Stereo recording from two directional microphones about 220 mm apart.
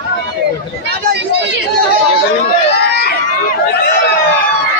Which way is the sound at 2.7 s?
50° left (ahead or behind).